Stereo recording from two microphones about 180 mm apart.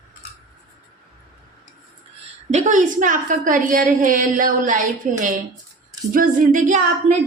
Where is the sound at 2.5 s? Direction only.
40° right (ahead or behind).